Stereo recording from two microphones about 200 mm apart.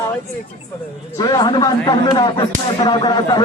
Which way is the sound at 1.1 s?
20° left (ahead or behind).